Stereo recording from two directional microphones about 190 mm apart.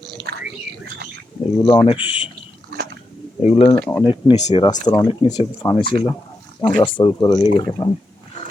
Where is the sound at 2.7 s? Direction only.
60° right (ahead or behind).